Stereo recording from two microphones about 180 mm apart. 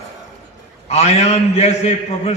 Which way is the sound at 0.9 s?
35° left (ahead or behind).